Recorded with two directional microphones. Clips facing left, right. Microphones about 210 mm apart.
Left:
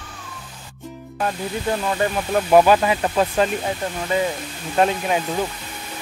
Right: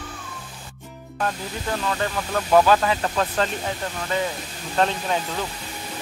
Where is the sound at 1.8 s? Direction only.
20° left (ahead or behind).